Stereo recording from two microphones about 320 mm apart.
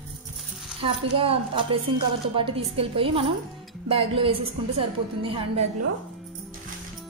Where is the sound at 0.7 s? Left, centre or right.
Centre.